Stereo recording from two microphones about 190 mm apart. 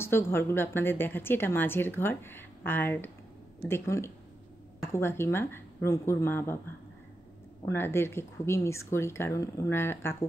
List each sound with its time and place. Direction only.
0.0 s a woman's voice: 15° left (ahead or behind)
7.6 s a woman's voice: 10° left (ahead or behind)